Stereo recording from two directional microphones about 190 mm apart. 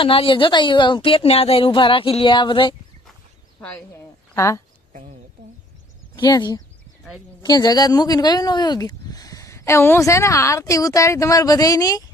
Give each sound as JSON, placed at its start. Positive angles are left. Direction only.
{"t": 0.0, "sound": "speech", "side_deg": 30}
{"t": 3.6, "sound": "a woman's voice", "side_deg": 10}
{"t": 4.9, "sound": "a sound", "side_deg": -40}
{"t": 6.1, "sound": "speech", "side_deg": 20}